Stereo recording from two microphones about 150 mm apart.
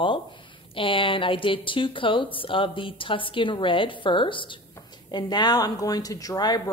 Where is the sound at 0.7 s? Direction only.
35° left (ahead or behind).